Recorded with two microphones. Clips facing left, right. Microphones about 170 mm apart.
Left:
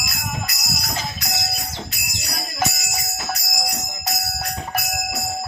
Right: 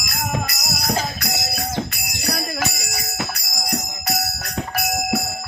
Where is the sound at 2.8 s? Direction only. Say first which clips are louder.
Right 2 dB; 60° right (ahead or behind).